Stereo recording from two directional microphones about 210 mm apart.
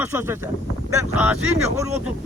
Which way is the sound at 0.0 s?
10° right (ahead or behind).